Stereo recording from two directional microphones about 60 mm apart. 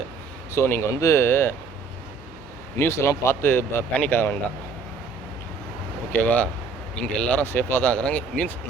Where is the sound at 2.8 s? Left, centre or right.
Left.